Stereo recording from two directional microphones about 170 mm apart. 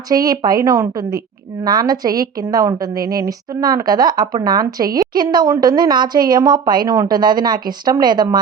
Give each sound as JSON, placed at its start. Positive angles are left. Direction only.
{"t": 0.1, "sound": "a woman's voice", "side_deg": -20}